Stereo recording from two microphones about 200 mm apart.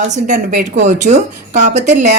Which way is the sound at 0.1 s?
40° right (ahead or behind).